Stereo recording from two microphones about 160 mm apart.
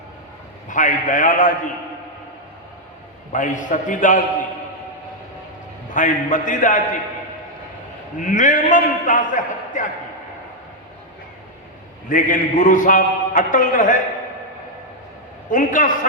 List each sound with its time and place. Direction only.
0.7 s a man's voice: 55° left (ahead or behind)
3.3 s a man's voice: 55° left (ahead or behind)
5.9 s a man's voice: 55° left (ahead or behind)
8.2 s a man's voice: 55° left (ahead or behind)
12.0 s a man's voice: 55° left (ahead or behind)
15.4 s a man's voice: 55° left (ahead or behind)